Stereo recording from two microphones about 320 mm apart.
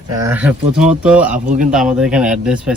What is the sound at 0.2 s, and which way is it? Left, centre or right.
Speech, centre.